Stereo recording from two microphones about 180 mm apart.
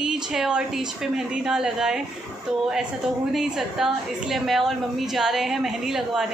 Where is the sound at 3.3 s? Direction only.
Centre (ahead or behind).